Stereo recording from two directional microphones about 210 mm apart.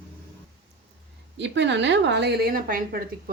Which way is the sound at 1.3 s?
60° right (ahead or behind).